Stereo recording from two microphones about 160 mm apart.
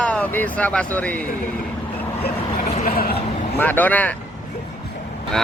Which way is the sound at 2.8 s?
65° left (ahead or behind).